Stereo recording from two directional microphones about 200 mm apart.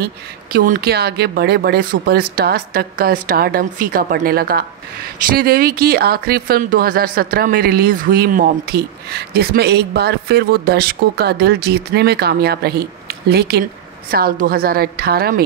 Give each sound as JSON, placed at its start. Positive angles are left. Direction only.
{"t": 0.0, "sound": "speech", "side_deg": -45}